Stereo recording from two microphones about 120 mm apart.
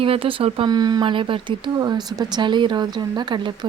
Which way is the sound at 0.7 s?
35° right (ahead or behind).